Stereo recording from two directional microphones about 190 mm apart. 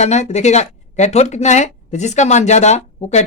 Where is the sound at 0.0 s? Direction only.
35° left (ahead or behind).